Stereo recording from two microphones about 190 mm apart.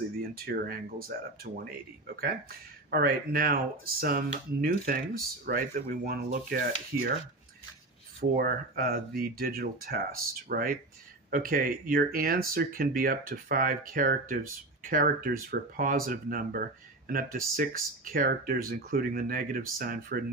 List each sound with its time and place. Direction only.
0.3 s speech: 50° right (ahead or behind)
2.9 s speech: 55° right (ahead or behind)
8.2 s speech: 50° right (ahead or behind)